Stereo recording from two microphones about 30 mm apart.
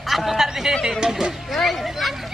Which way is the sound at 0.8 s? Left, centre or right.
Right.